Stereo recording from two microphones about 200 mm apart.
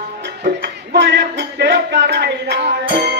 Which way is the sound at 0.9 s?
60° right (ahead or behind).